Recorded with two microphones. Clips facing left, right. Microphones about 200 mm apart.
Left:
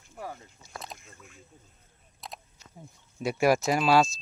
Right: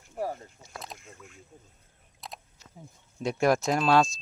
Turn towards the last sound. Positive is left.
turn(degrees=5)  # may be behind; listen again after turning